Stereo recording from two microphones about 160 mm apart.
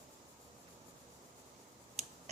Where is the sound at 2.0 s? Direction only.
45° right (ahead or behind).